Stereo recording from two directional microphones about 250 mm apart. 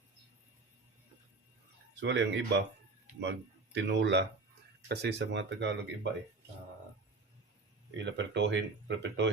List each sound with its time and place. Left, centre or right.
2.0 s speech: right
7.9 s speech: right